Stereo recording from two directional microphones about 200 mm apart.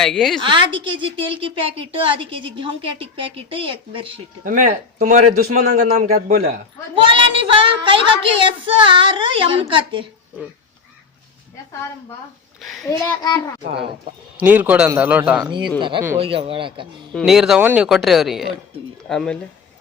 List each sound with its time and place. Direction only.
0.0 s speech: 5° left (ahead or behind)
0.4 s a woman's voice: 25° right (ahead or behind)
4.4 s a man's voice: 40° right (ahead or behind)
6.9 s a woman's voice: 25° right (ahead or behind)
12.5 s a sound: centre (ahead or behind)
12.8 s a child's voice: 15° left (ahead or behind)
14.3 s a man's voice: 10° right (ahead or behind)
15.4 s a woman's voice: 20° right (ahead or behind)
17.1 s speech: centre (ahead or behind)